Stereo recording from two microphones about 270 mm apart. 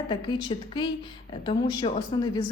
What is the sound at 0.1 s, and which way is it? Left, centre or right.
A woman's voice, centre.